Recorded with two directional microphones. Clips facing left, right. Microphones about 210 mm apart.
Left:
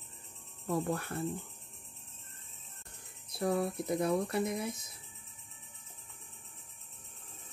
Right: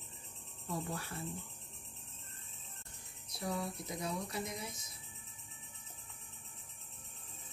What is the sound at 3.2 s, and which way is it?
Speech, 55° left (ahead or behind).